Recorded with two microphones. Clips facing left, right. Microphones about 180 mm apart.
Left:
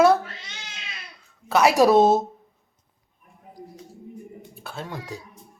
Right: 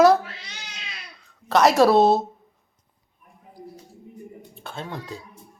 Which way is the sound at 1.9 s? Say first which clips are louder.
Even; 45° left (ahead or behind).